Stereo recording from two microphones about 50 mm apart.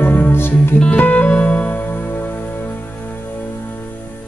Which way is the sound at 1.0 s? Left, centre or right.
Left.